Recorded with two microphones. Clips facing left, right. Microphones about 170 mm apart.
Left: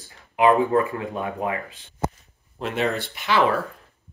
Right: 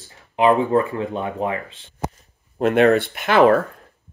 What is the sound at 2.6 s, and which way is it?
Speech, 60° right (ahead or behind).